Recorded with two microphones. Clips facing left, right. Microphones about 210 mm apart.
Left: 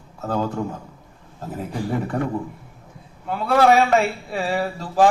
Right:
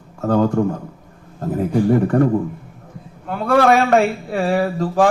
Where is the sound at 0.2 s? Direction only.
50° right (ahead or behind).